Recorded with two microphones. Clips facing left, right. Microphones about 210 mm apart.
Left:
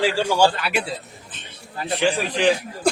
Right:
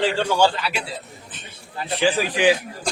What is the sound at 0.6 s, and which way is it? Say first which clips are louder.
Speech: left 3 dB; 55° left (ahead or behind).